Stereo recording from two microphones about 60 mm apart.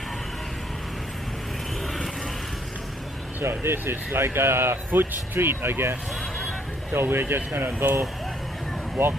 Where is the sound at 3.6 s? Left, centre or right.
Right.